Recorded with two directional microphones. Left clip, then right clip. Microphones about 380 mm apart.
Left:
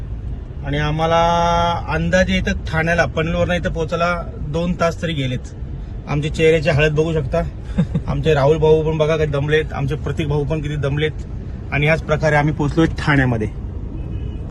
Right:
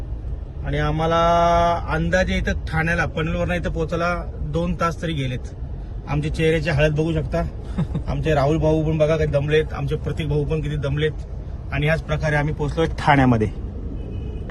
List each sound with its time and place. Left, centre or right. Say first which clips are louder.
0.6 s speech: left 3 dB; centre